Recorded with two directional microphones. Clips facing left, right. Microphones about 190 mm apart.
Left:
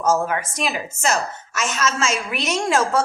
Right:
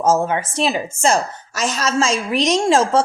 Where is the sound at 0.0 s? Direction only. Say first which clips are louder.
Right 3 dB; 25° right (ahead or behind).